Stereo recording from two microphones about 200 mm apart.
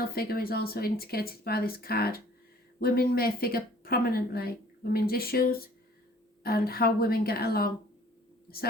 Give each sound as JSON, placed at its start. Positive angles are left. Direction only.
{"t": 0.0, "sound": "speech", "side_deg": 50}